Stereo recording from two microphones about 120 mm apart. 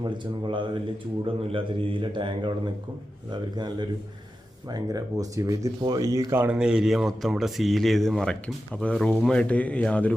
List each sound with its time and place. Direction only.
0.0 s a man's voice: 40° right (ahead or behind)
4.7 s speech: 30° right (ahead or behind)
6.6 s speech: 5° right (ahead or behind); by 10.2 s 10° left (ahead or behind)